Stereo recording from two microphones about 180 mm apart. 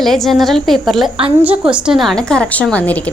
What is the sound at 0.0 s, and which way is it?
A woman's voice, centre (ahead or behind).